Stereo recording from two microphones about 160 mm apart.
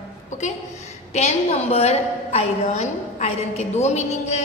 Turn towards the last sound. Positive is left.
turn(degrees=45)  # may be behind; listen again after turning